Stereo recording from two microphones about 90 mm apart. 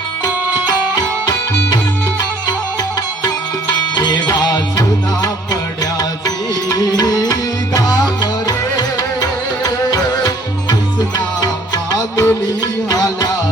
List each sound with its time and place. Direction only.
3.9 s music: 50° left (ahead or behind)